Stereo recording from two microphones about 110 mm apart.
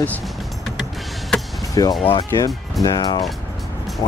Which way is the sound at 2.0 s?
60° left (ahead or behind).